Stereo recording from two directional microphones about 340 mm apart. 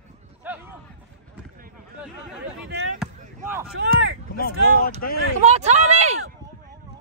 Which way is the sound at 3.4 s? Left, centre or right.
Centre.